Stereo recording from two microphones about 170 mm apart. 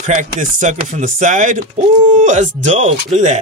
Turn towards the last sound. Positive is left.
turn(degrees=-45)  # may be behind; listen again after turning